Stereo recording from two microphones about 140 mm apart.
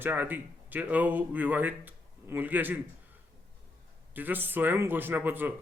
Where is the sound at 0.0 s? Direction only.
15° right (ahead or behind).